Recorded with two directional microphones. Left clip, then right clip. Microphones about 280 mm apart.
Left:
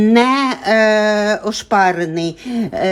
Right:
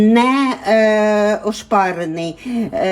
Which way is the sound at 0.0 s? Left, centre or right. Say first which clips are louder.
Left 1 dB; left.